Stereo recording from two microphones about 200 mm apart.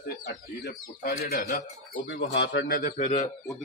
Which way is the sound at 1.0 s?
45° left (ahead or behind).